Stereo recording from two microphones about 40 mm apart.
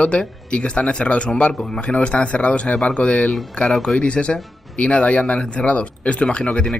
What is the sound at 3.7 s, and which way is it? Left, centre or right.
Speech, centre.